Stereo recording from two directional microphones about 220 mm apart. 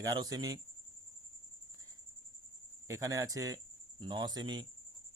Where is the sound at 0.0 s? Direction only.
15° right (ahead or behind).